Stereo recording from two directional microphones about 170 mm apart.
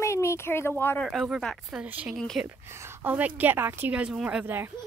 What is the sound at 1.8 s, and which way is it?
Speech, 10° right (ahead or behind).